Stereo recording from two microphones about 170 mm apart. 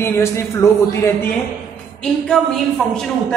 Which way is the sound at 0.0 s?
15° left (ahead or behind).